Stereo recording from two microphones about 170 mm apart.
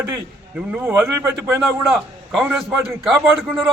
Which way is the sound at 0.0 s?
10° right (ahead or behind).